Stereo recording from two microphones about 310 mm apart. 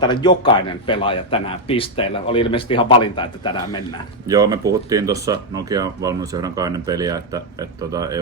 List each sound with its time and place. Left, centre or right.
0.0 s a man's voice: centre
4.3 s speech: centre